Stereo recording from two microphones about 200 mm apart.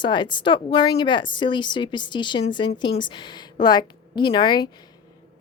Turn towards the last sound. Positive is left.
turn(degrees=20)  # may be behind; listen again after turning